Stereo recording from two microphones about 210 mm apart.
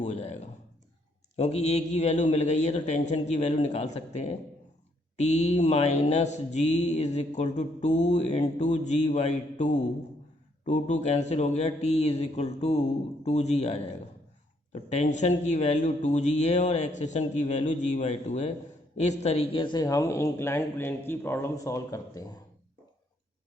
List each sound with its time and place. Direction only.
0.0 s speech: 30° left (ahead or behind)
1.4 s mantra: 30° left (ahead or behind)
18.9 s speech: 30° left (ahead or behind)